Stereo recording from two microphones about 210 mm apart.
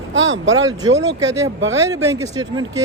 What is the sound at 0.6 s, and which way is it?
A man's voice, 20° right (ahead or behind).